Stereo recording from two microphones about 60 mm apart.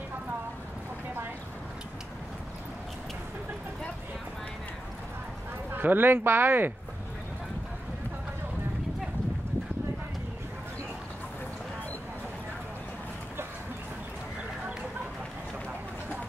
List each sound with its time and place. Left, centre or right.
5.7 s speech: right